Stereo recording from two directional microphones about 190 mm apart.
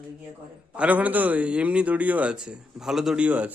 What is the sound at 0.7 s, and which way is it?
A man's voice, 10° right (ahead or behind).